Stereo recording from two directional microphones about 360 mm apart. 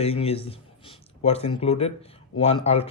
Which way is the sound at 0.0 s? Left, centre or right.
Centre.